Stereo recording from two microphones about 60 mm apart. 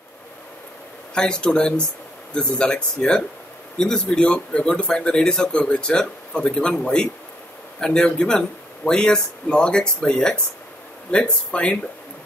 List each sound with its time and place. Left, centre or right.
1.1 s speech: centre